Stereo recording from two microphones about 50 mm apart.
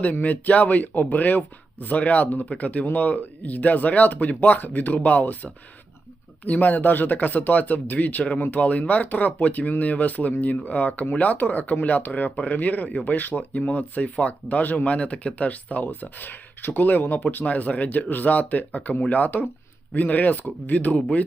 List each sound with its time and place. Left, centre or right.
0.0 s speech: left
17.4 s speech: left